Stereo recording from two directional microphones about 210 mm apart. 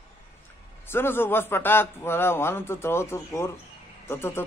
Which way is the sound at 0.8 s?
10° left (ahead or behind).